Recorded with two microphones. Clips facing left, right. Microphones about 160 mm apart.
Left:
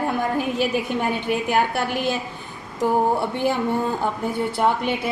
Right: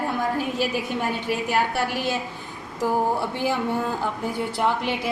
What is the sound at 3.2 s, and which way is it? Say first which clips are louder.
Speech: left 3 dB; 60° left (ahead or behind).